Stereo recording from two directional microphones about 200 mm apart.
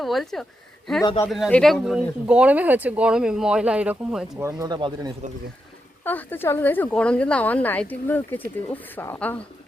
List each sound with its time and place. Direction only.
0.0 s speech: centre (ahead or behind)
1.0 s speech: 20° left (ahead or behind)
1.3 s speech: centre (ahead or behind)
4.4 s speech: 20° right (ahead or behind)
6.1 s speech: 10° left (ahead or behind)